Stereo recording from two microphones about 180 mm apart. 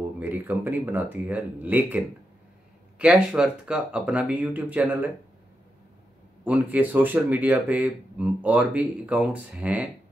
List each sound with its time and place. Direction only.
0.0 s speech: 10° right (ahead or behind)
6.4 s speech: 10° right (ahead or behind)